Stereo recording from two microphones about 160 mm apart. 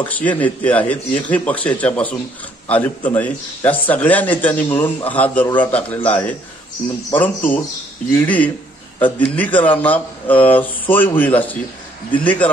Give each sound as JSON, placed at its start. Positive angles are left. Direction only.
{"t": 0.0, "sound": "speech", "side_deg": 10}